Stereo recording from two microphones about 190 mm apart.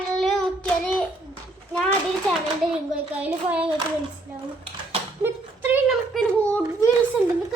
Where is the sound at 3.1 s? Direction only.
5° right (ahead or behind).